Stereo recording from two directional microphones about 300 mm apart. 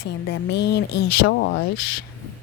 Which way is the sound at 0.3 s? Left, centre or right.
Left.